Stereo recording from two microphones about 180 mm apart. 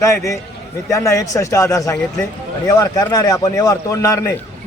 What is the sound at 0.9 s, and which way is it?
A man's voice, 15° left (ahead or behind).